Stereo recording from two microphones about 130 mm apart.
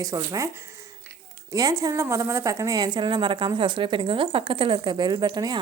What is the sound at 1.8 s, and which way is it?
A woman's voice, 25° right (ahead or behind).